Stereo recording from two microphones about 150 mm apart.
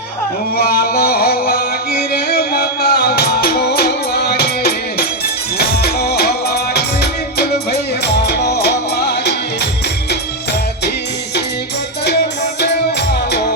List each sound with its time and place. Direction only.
0.5 s music: 90° left